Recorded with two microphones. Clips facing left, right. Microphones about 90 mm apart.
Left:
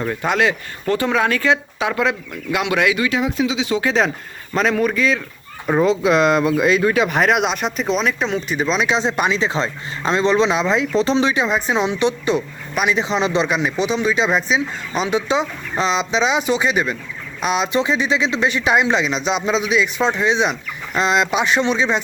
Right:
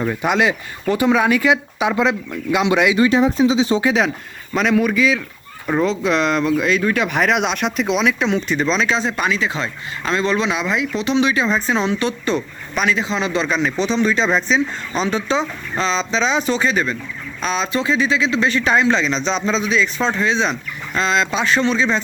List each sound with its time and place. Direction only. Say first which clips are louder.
0.0 s speech: right 1 dB; 15° right (ahead or behind)
3.0 s speech: right 5 dB; 30° right (ahead or behind)
4.5 s speech: right 1 dB; centre (ahead or behind)
8.9 s speech: left 1 dB; 20° left (ahead or behind)
11.3 s speech: even; 15° left (ahead or behind)